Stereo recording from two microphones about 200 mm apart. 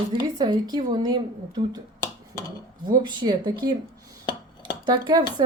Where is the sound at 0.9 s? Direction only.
20° right (ahead or behind).